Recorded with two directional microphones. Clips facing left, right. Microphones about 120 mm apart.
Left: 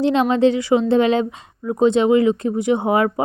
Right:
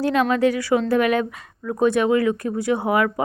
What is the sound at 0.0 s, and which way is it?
A woman's voice, 25° left (ahead or behind).